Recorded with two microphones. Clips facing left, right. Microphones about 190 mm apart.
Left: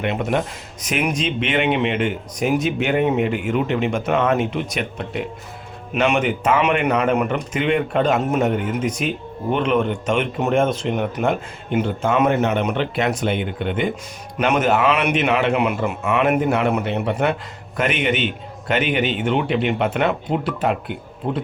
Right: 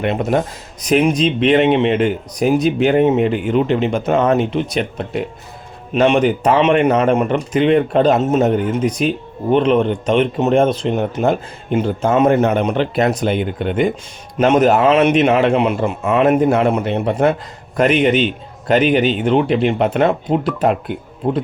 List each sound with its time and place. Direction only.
0.0 s speech: 35° right (ahead or behind)
5.9 s speech: 30° right (ahead or behind)